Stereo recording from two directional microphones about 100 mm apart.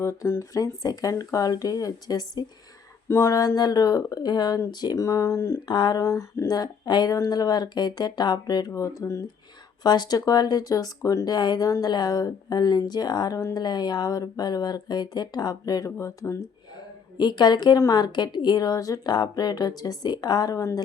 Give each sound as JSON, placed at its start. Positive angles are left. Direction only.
{"t": 0.0, "sound": "a woman's voice", "side_deg": 30}
{"t": 3.1, "sound": "a woman's voice", "side_deg": 30}
{"t": 5.6, "sound": "speech", "side_deg": 50}
{"t": 6.0, "sound": "speech", "side_deg": 30}
{"t": 6.6, "sound": "speech", "side_deg": 45}
{"t": 9.8, "sound": "a woman's voice", "side_deg": 45}
{"t": 11.3, "sound": "speech", "side_deg": 45}
{"t": 17.2, "sound": "a woman's voice", "side_deg": 45}